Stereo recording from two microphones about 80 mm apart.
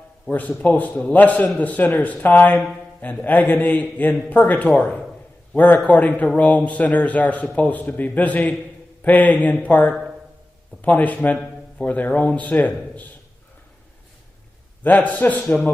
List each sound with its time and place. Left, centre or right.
0.3 s a man's voice: left
14.8 s a man's voice: centre